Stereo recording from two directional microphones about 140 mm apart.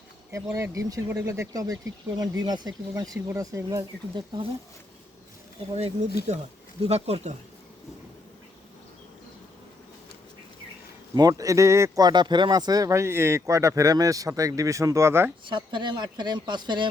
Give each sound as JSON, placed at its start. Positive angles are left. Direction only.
{"t": 0.5, "sound": "speech", "side_deg": -20}
{"t": 5.7, "sound": "speech", "side_deg": -50}
{"t": 11.1, "sound": "speech", "side_deg": -25}
{"t": 15.4, "sound": "speech", "side_deg": -35}